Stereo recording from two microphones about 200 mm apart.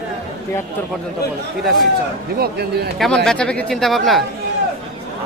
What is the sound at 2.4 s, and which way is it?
Speech, 50° right (ahead or behind).